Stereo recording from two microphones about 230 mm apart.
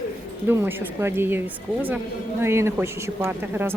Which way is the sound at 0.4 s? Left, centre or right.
Centre.